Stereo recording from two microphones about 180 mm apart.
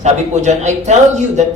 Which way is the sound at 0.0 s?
40° right (ahead or behind).